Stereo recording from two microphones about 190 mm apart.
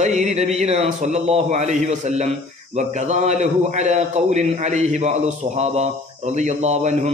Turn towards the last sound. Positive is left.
turn(degrees=-35)  # may be behind; listen again after turning